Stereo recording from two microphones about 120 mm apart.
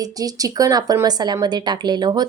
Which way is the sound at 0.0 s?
30° right (ahead or behind).